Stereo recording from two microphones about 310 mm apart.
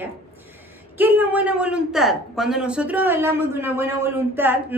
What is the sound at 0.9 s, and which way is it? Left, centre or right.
A woman's voice, centre.